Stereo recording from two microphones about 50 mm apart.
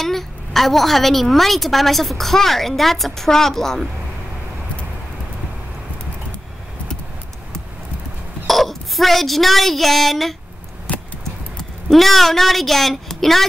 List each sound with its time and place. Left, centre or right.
0.0 s a woman's voice: centre
8.5 s speech: centre
10.9 s a sound: left
11.9 s a woman's voice: centre